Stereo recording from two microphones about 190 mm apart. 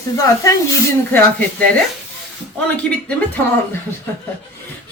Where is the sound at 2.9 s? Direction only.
Centre (ahead or behind).